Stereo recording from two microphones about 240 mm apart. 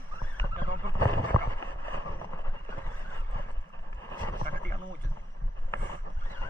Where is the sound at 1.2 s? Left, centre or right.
Centre.